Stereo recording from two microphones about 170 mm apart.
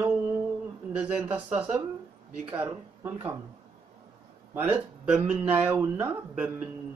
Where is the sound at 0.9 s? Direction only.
5° right (ahead or behind).